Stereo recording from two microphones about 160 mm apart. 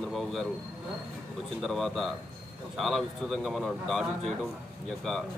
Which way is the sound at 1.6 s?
Centre (ahead or behind).